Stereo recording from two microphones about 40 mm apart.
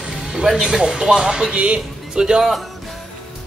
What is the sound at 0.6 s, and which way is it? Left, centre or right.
Speech, centre.